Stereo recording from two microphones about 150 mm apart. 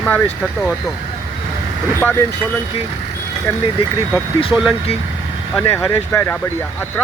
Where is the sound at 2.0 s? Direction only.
15° left (ahead or behind).